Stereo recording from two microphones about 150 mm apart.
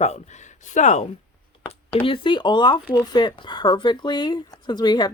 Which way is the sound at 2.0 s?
35° left (ahead or behind).